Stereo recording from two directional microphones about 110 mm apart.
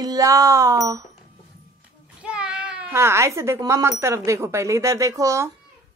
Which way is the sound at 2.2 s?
10° right (ahead or behind).